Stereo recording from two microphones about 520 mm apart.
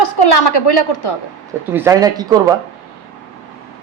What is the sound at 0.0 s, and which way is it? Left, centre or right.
Speech, left.